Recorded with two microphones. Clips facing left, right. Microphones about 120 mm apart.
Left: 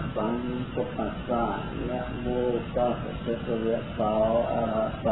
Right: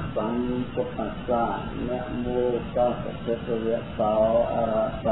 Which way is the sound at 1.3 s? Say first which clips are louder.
Right 4 dB; centre (ahead or behind).